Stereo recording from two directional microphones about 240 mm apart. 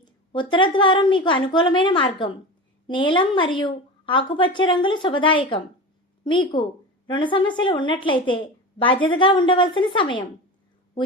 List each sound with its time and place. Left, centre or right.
0.0 s a woman's voice: centre